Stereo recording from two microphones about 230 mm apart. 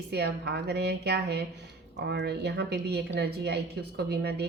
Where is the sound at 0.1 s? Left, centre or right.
Right.